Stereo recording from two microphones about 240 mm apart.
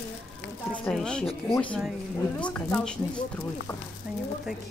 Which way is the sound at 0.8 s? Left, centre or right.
Centre.